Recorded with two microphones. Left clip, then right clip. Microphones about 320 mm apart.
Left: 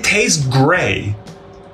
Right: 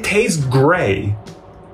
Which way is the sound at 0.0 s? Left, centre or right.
Centre.